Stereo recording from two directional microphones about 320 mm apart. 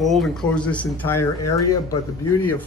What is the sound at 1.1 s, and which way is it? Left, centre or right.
Speech, left.